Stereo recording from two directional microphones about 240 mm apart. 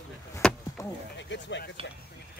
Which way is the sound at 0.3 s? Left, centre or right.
Centre.